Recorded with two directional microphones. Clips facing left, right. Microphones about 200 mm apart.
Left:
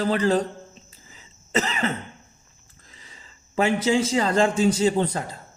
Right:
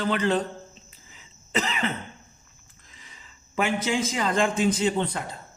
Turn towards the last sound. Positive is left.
turn(degrees=40)  # may be behind; listen again after turning